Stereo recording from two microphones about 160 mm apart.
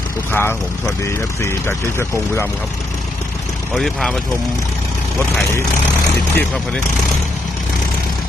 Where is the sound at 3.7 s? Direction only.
Centre (ahead or behind).